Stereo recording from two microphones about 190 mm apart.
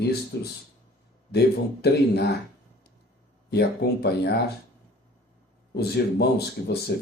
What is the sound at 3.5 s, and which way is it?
Speech, 60° left (ahead or behind).